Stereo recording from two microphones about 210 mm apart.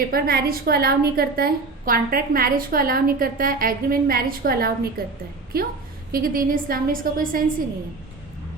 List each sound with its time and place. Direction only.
0.1 s a woman's voice: 45° right (ahead or behind)